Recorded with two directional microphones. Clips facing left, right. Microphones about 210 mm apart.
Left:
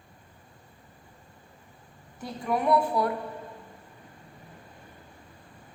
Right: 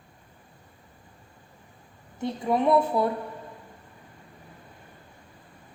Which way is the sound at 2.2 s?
25° right (ahead or behind).